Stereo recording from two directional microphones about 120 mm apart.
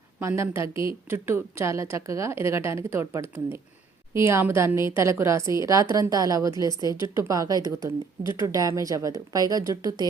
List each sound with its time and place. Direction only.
0.2 s a woman's voice: 20° right (ahead or behind)